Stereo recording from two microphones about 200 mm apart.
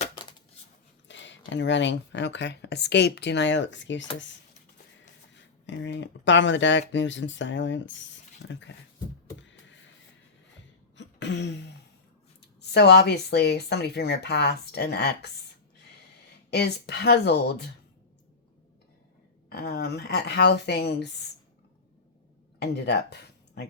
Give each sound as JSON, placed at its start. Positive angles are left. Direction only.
{"t": 1.0, "sound": "speech", "side_deg": 65}
{"t": 5.6, "sound": "speech", "side_deg": 65}
{"t": 9.4, "sound": "a sound", "side_deg": 65}
{"t": 10.9, "sound": "throat clearing", "side_deg": 60}
{"t": 12.6, "sound": "speech", "side_deg": 60}
{"t": 16.5, "sound": "speech", "side_deg": 55}
{"t": 19.5, "sound": "speech", "side_deg": 55}
{"t": 22.6, "sound": "speech", "side_deg": 55}